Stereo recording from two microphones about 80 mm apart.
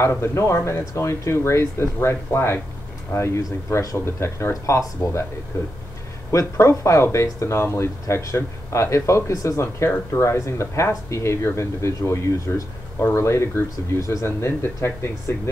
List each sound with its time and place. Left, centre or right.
0.0 s speech: left